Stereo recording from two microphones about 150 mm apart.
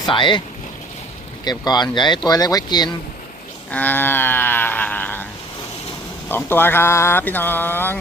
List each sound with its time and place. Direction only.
0.0 s speech: 30° left (ahead or behind)
1.5 s speech: 25° left (ahead or behind)
3.7 s speech: 10° left (ahead or behind)
6.2 s speech: 15° left (ahead or behind)